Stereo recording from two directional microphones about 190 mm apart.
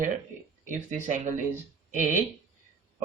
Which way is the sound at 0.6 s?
40° right (ahead or behind).